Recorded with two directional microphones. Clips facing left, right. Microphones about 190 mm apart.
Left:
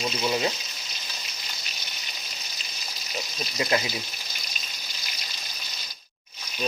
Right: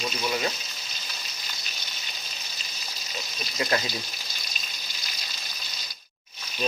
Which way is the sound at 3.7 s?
20° left (ahead or behind).